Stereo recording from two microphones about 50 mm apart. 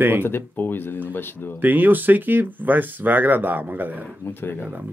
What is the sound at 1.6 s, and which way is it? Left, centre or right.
Speech, right.